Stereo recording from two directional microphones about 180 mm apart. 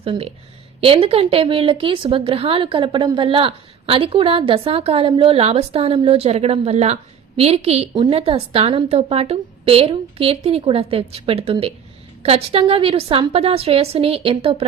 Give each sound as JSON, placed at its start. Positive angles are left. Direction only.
{"t": 0.0, "sound": "a woman's voice", "side_deg": -30}